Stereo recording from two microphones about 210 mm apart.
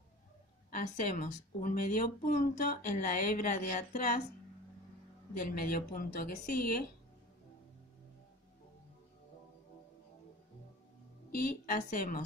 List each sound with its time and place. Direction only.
0.7 s speech: 40° left (ahead or behind)
5.3 s a woman's voice: 45° left (ahead or behind)
11.3 s a woman's voice: 40° left (ahead or behind)